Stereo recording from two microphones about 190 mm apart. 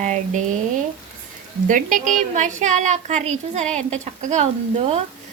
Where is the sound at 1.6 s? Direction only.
45° right (ahead or behind).